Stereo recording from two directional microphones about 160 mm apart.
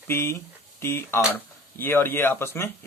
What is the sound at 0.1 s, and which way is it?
Speech, 15° left (ahead or behind).